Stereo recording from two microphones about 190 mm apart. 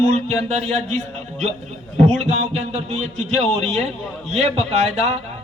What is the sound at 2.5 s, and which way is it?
Speech, 35° right (ahead or behind).